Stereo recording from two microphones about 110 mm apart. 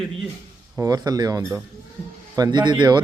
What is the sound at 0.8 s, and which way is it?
A man's voice, 35° right (ahead or behind).